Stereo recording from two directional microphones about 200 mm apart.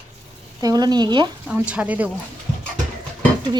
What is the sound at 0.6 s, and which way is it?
Speech, 20° right (ahead or behind).